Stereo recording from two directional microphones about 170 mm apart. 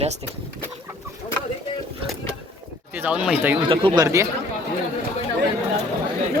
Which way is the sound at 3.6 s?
30° right (ahead or behind).